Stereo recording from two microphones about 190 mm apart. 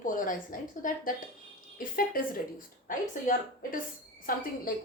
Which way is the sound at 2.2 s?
50° left (ahead or behind).